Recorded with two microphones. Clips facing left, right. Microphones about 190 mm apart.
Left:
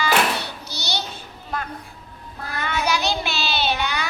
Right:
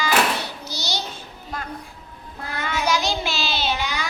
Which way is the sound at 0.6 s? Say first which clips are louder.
Even; 65° left (ahead or behind).